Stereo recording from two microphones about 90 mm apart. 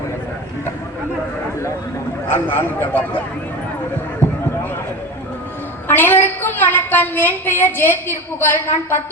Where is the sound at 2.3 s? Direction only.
25° left (ahead or behind).